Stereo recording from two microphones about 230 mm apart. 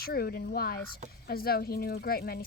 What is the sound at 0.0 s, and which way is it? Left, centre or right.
Speech, left.